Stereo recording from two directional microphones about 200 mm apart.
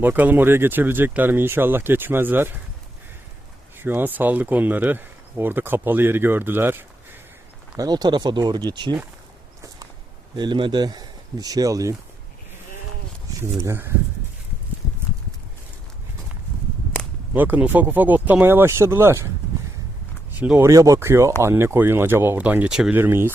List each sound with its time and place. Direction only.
0.0 s speech: 10° right (ahead or behind)
3.8 s speech: 10° right (ahead or behind)
10.3 s speech: 25° right (ahead or behind)
13.4 s speech: 15° right (ahead or behind)
16.9 s a sound: 5° left (ahead or behind)
17.3 s speech: 10° right (ahead or behind)
20.4 s speech: 10° right (ahead or behind)